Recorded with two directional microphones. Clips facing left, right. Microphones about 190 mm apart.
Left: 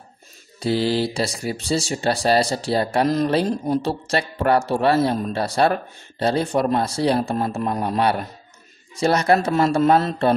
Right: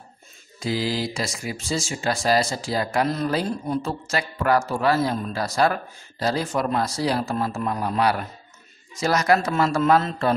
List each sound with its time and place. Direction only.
0.6 s mantra: 30° left (ahead or behind)
1.1 s speech: 35° left (ahead or behind)